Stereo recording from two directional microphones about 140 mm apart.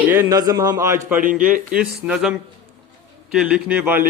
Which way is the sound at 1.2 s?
80° right.